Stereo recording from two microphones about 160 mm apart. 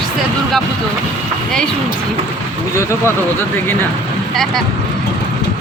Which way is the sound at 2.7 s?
20° left (ahead or behind).